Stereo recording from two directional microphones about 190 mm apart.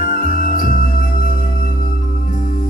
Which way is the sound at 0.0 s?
45° left (ahead or behind).